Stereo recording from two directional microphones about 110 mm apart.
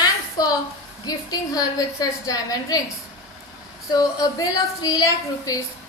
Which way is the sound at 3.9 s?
35° left (ahead or behind).